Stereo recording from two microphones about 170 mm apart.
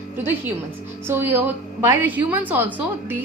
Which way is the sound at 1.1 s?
15° right (ahead or behind).